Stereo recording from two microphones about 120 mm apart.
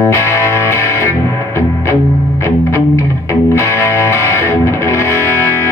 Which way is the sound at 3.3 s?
20° left (ahead or behind).